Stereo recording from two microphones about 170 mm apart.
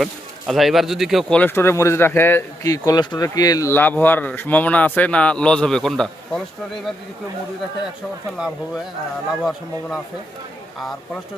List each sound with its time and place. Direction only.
0.0 s speech: centre (ahead or behind)
8.4 s speech: centre (ahead or behind)